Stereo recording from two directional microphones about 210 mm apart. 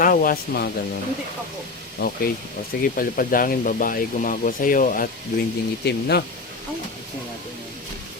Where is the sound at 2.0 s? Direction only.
45° left (ahead or behind).